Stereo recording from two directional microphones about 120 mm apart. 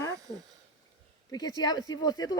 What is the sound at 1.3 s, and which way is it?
Speech, 35° left (ahead or behind).